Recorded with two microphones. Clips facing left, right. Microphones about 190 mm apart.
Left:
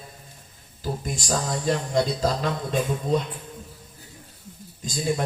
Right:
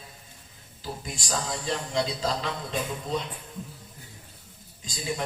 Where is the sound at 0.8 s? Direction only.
45° left (ahead or behind).